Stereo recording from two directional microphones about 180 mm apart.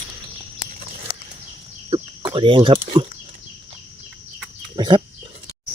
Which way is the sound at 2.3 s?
30° right (ahead or behind).